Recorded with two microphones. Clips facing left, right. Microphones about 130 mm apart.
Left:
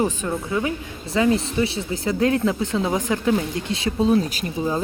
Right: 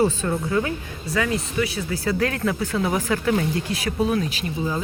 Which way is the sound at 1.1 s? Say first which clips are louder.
Left 5 dB; 25° left (ahead or behind).